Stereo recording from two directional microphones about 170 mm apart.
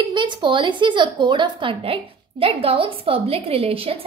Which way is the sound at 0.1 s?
25° right (ahead or behind).